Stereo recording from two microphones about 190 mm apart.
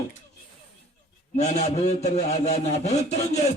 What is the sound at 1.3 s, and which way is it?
A man's voice, 35° left (ahead or behind).